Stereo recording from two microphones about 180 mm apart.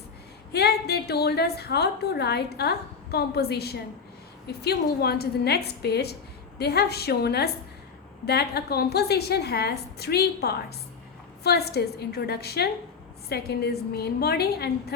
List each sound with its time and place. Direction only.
0.5 s a woman's voice: 65° left (ahead or behind)